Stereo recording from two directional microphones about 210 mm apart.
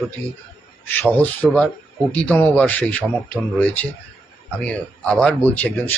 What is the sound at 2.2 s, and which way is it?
Speech, 10° left (ahead or behind).